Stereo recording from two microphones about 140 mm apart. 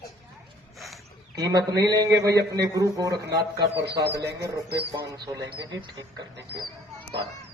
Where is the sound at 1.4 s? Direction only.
25° right (ahead or behind).